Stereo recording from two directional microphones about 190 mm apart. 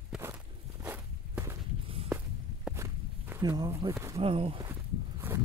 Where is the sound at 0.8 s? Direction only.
10° right (ahead or behind).